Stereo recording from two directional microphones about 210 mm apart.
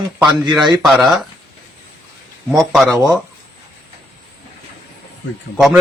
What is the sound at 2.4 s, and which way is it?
Speech, centre (ahead or behind).